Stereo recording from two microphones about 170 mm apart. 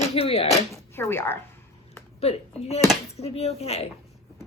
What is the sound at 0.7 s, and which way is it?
Speech, 15° left (ahead or behind).